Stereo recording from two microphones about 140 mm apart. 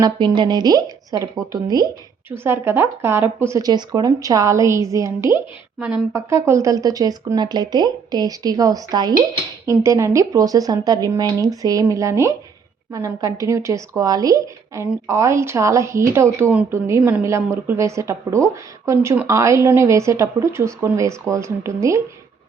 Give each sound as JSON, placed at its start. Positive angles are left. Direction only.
{"t": 0.0, "sound": "speech", "side_deg": -30}
{"t": 2.3, "sound": "speech", "side_deg": -15}
{"t": 3.7, "sound": "speech", "side_deg": -30}